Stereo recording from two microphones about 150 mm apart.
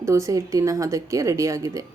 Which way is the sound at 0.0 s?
20° right (ahead or behind).